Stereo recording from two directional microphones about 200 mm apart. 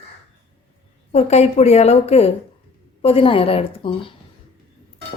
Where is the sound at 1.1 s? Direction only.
35° left (ahead or behind).